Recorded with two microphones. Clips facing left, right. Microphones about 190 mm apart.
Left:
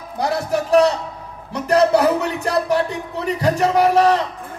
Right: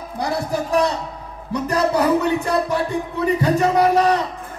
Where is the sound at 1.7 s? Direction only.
80° left.